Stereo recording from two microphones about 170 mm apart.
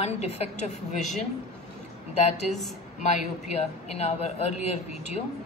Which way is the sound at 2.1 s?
40° left (ahead or behind).